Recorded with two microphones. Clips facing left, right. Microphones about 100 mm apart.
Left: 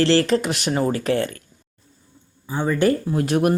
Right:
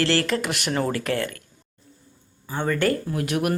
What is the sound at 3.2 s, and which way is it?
Speech, 30° left (ahead or behind).